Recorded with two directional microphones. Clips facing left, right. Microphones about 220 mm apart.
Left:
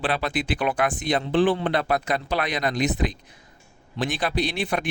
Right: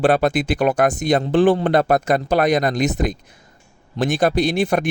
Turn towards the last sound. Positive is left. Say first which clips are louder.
# right 7 dB
turn(degrees=-45)  # may be behind; listen again after turning